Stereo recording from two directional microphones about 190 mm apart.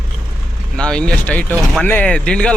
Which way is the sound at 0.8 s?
5° left (ahead or behind).